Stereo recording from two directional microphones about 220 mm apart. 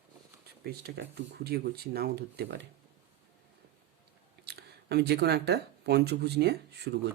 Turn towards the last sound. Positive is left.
turn(degrees=-50)  # may be behind; listen again after turning